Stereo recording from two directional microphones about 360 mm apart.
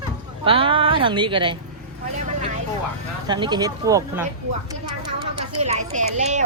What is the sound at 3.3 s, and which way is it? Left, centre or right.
Speech, centre.